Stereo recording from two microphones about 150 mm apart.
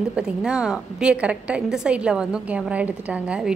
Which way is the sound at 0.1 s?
5° right (ahead or behind).